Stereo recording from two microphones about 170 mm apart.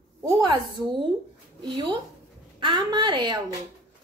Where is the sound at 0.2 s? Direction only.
25° right (ahead or behind).